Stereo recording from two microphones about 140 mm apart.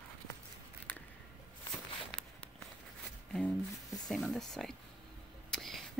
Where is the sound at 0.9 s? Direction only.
10° left (ahead or behind).